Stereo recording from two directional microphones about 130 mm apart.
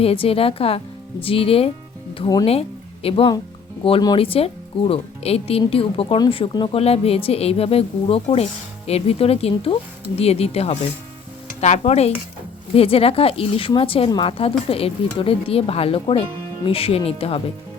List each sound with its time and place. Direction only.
0.0 s speech: 50° left (ahead or behind)
2.5 s a woman's voice: 50° left (ahead or behind)
6.7 s speech: 50° left (ahead or behind)